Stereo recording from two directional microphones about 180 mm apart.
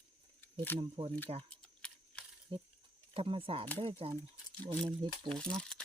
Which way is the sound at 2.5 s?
30° right (ahead or behind).